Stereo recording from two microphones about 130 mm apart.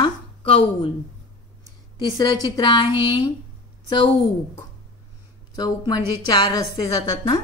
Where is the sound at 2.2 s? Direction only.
30° left (ahead or behind).